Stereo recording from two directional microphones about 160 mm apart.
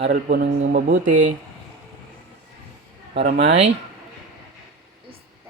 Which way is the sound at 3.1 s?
45° right (ahead or behind).